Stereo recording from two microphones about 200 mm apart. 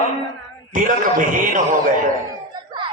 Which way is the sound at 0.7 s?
40° right (ahead or behind).